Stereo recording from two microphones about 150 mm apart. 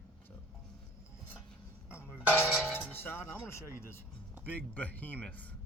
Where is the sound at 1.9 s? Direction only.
15° left (ahead or behind).